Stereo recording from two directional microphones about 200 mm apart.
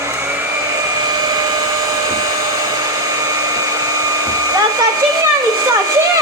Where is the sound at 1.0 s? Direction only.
20° right (ahead or behind).